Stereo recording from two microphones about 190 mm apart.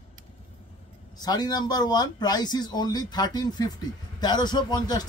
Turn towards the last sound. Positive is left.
turn(degrees=20)  # may be behind; listen again after turning